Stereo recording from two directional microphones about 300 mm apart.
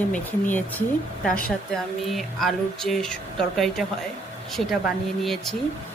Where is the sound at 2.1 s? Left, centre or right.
Centre.